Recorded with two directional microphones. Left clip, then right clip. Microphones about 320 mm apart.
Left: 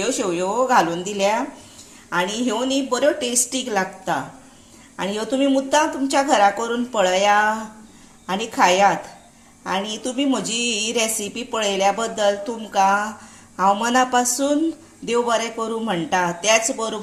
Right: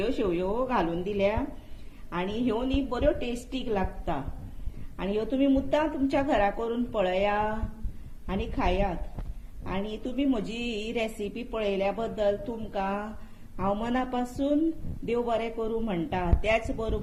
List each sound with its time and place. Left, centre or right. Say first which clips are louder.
0.0 s a woman's voice: left 6 dB; left